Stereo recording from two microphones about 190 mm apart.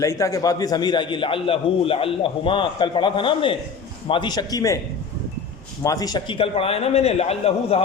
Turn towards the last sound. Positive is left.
turn(degrees=30)  # may be behind; listen again after turning